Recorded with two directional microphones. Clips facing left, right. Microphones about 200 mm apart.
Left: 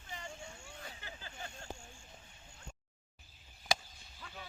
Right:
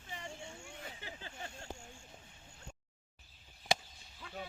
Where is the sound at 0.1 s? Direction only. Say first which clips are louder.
Right 1 dB; 30° right (ahead or behind).